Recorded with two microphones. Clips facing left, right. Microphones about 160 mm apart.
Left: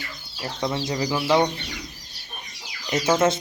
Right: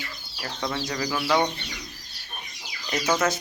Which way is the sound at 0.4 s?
20° left (ahead or behind).